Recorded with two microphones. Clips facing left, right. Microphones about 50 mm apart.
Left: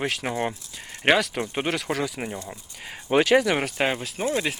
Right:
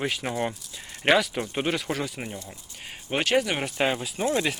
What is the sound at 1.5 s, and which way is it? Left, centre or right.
Speech, left.